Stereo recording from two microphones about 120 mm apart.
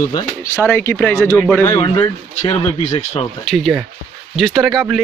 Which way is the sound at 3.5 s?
5° left (ahead or behind).